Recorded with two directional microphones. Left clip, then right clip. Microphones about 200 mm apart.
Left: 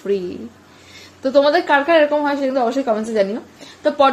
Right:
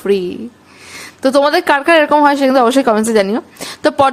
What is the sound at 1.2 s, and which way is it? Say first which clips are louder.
A woman's voice: right 3 dB; 35° right (ahead or behind).